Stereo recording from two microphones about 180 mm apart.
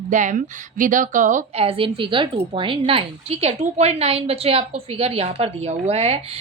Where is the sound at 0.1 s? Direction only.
45° right (ahead or behind).